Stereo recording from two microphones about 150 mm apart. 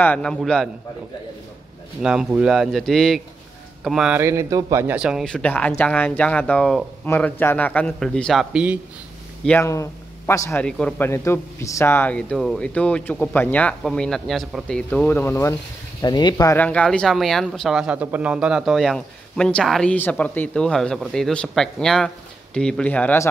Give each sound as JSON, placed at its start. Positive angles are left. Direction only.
{"t": 0.0, "sound": "speech", "side_deg": 5}
{"t": 2.0, "sound": "speech", "side_deg": -5}
{"t": 4.2, "sound": "speech", "side_deg": -20}
{"t": 4.9, "sound": "speech", "side_deg": -5}
{"t": 5.3, "sound": "a man's voice", "side_deg": 10}
{"t": 9.6, "sound": "a man's voice", "side_deg": 20}
{"t": 10.6, "sound": "a man's voice", "side_deg": 5}
{"t": 11.1, "sound": "a man's voice", "side_deg": 20}
{"t": 16.0, "sound": "speech", "side_deg": 30}
{"t": 16.5, "sound": "speech", "side_deg": 10}